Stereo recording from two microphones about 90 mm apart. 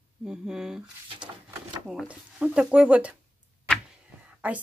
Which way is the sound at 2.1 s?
10° right (ahead or behind).